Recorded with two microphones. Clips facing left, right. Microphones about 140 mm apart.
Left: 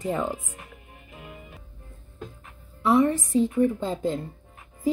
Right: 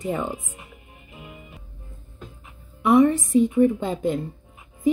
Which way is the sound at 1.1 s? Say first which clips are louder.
Right 1 dB; 5° right (ahead or behind).